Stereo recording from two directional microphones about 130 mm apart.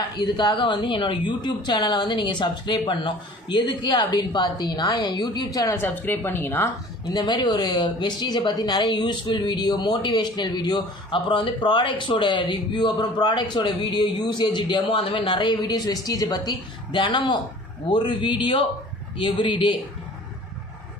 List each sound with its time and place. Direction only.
0.2 s a woman's voice: 35° left (ahead or behind)
5.8 s a woman's voice: 15° left (ahead or behind)
7.1 s a woman's voice: 35° left (ahead or behind)